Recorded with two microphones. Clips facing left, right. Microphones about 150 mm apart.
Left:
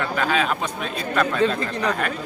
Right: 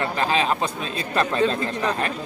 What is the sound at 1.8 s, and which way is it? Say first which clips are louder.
Speech: left 2 dB; 25° right (ahead or behind).